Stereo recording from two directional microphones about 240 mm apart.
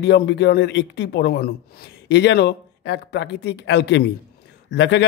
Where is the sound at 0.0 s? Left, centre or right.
Left.